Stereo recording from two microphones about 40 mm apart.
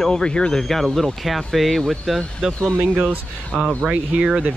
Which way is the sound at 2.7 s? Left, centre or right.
Right.